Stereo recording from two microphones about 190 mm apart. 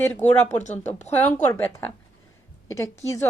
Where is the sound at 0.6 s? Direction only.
40° left (ahead or behind).